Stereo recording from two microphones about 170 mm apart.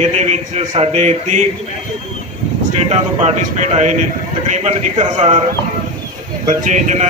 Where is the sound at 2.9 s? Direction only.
40° right (ahead or behind).